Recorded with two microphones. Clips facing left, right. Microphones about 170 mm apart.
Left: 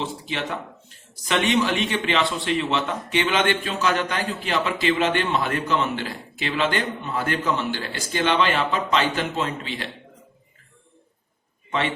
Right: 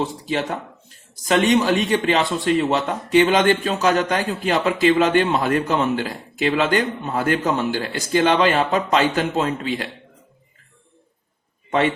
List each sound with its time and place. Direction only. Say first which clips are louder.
0.3 s a man's voice: right 5 dB; 40° right (ahead or behind)